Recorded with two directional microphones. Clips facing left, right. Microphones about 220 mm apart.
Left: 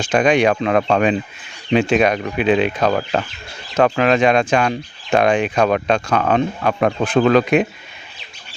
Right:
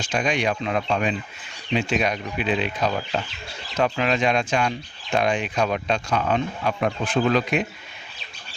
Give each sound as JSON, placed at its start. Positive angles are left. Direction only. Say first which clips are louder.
{"t": 0.0, "sound": "speech", "louder": "left 9 dB", "side_deg": 55}
{"t": 1.7, "sound": "speech", "louder": "left 8 dB", "side_deg": 65}
{"t": 4.2, "sound": "speech", "louder": "left 7 dB", "side_deg": 55}